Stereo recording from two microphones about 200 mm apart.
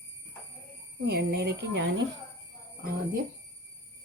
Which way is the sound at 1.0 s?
55° right (ahead or behind).